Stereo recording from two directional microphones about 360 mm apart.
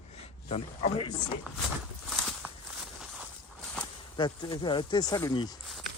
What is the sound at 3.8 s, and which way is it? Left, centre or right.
Speech, centre.